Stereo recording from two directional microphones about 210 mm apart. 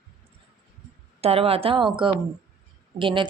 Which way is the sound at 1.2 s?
30° right (ahead or behind).